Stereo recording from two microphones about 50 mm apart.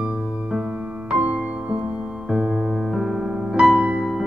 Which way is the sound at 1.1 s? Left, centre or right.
Right.